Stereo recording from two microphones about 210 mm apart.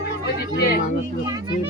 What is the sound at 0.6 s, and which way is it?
Speech, 45° left (ahead or behind).